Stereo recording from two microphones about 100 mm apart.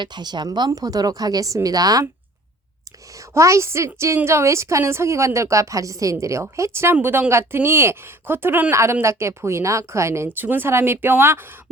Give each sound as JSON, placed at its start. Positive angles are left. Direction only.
{"t": 0.0, "sound": "a woman's voice", "side_deg": -45}
{"t": 3.2, "sound": "a woman's voice", "side_deg": -30}